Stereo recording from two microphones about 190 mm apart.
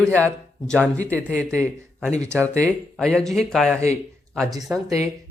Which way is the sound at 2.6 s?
Centre (ahead or behind).